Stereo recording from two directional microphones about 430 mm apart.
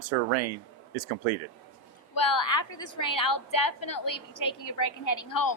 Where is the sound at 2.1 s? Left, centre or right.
Left.